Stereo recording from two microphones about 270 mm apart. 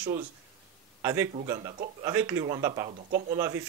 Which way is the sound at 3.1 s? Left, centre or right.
Right.